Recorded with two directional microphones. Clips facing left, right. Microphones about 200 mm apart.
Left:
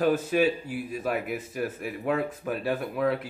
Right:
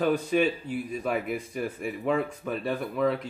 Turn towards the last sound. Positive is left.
turn(degrees=5)  # may be behind; listen again after turning